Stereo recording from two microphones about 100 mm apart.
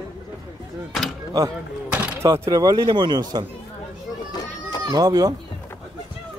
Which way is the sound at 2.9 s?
50° right (ahead or behind).